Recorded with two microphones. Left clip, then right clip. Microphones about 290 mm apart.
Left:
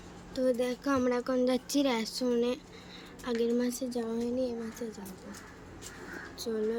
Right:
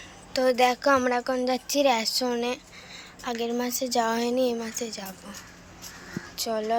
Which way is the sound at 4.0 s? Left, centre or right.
Right.